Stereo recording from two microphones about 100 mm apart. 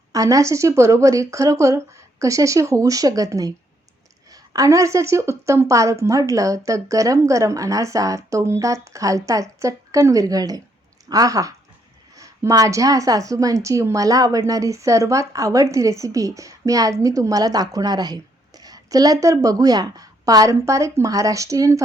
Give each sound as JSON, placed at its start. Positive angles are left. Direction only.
{"t": 0.1, "sound": "a woman's voice", "side_deg": -35}